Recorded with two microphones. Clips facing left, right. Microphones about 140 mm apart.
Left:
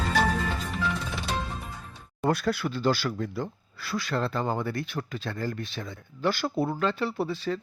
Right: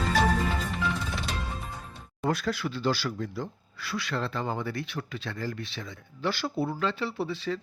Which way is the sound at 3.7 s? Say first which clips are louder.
Left 3 dB; 40° left (ahead or behind).